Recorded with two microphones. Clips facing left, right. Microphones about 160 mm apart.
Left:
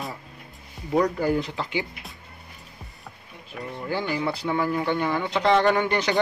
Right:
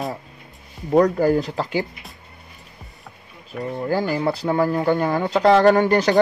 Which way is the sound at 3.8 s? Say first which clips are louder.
Right 5 dB; 40° right (ahead or behind).